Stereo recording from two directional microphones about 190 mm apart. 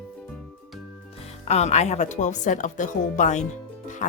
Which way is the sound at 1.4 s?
35° left (ahead or behind).